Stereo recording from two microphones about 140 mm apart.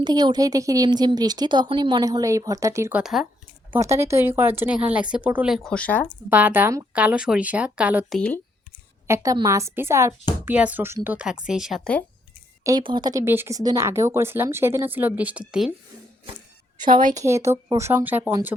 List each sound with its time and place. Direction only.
0.0 s speech: 30° right (ahead or behind)
3.0 s speech: centre (ahead or behind)
3.7 s speech: 20° right (ahead or behind); by 6.1 s 10° left (ahead or behind)
6.3 s speech: 10° right (ahead or behind)
8.1 s speech: 10° left (ahead or behind)
9.0 s speech: 20° right (ahead or behind); by 11.9 s centre (ahead or behind)
12.8 s speech: 35° right (ahead or behind)
13.2 s speech: 15° right (ahead or behind)
16.8 s a woman's voice: 75° right (ahead or behind)
17.2 s speech: 20° right (ahead or behind)